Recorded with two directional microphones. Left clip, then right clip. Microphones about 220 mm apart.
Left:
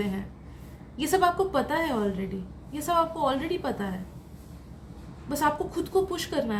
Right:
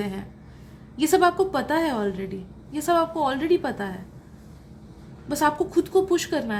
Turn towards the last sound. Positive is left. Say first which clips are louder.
# right 5 dB
turn(degrees=-30)  # may be behind; listen again after turning